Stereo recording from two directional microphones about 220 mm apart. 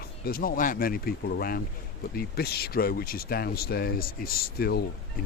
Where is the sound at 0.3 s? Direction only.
40° left (ahead or behind).